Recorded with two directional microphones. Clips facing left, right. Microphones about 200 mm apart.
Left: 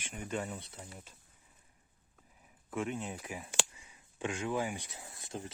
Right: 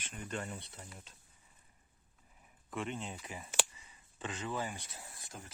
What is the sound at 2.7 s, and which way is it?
Speech, 5° left (ahead or behind).